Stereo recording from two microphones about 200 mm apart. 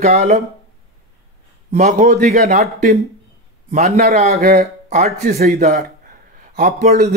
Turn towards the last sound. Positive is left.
turn(degrees=-35)  # may be behind; listen again after turning